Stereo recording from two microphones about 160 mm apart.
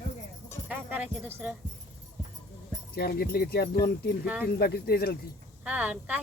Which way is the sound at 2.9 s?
75° left (ahead or behind).